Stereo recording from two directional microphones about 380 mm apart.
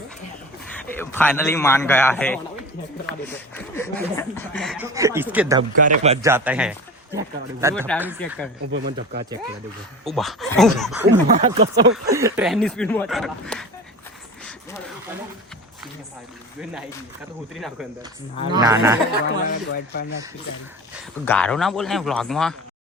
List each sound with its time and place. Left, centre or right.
0.9 s speech: centre
5.9 s speech: centre
6.3 s speech: centre
7.8 s speech: centre
8.6 s speech: right
10.0 s speech: centre
11.3 s speech: centre
11.7 s speech: right
12.1 s speech: centre
17.5 s speech: centre
19.5 s speech: left
21.2 s speech: centre